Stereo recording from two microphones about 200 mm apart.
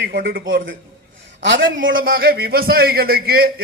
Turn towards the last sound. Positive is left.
turn(degrees=-50)  # may be behind; listen again after turning